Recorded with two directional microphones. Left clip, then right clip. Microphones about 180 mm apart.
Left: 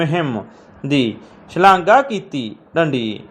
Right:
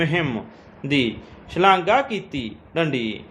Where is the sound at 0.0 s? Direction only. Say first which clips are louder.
Left 3 dB; 15° left (ahead or behind).